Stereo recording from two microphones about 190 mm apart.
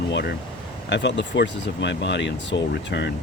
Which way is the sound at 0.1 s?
65° left (ahead or behind).